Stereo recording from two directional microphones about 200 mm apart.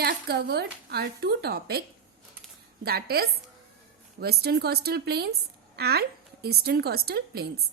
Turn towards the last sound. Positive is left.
turn(degrees=-55)  # may be behind; listen again after turning